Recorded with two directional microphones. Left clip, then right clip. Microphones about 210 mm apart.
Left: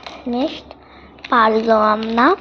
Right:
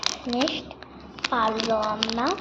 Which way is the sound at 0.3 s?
30° left (ahead or behind).